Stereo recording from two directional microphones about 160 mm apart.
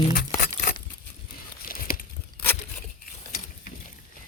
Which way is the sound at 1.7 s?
60° left (ahead or behind).